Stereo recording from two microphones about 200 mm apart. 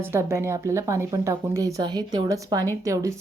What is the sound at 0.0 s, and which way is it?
Speech, 15° right (ahead or behind).